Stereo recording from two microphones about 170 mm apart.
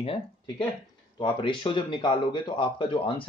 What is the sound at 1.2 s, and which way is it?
Speech, 30° left (ahead or behind).